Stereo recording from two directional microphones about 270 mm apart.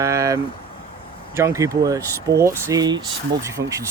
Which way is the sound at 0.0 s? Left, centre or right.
Centre.